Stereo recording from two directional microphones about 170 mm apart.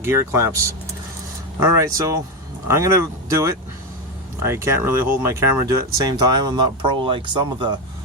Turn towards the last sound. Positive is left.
turn(degrees=-25)  # may be behind; listen again after turning